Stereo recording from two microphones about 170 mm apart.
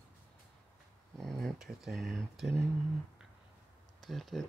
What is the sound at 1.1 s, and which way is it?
Speech, centre (ahead or behind).